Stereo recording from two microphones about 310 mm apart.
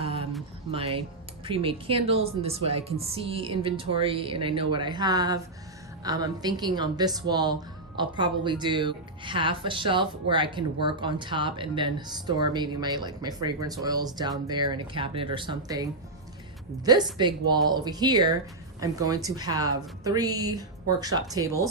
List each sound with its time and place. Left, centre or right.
0.7 s a woman's voice: centre
17.2 s a woman's voice: centre